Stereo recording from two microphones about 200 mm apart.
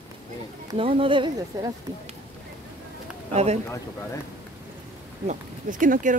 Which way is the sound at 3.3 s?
35° right (ahead or behind).